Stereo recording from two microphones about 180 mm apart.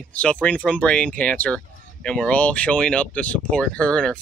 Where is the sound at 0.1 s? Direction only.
5° left (ahead or behind).